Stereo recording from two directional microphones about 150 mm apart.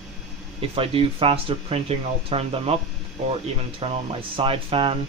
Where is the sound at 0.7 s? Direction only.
40° right (ahead or behind).